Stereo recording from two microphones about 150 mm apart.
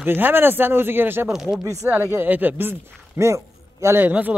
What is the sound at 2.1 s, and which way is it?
Speech, 10° right (ahead or behind).